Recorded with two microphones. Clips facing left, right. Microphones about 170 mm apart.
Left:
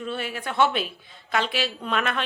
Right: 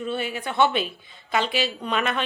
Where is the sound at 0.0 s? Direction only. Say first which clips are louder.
Right 2 dB; centre (ahead or behind).